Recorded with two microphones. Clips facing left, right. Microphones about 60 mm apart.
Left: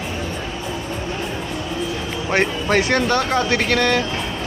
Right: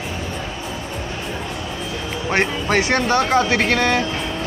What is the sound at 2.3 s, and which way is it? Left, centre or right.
Speech, centre.